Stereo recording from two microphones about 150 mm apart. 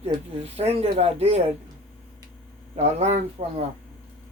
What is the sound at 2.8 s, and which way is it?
Speech, 50° right (ahead or behind).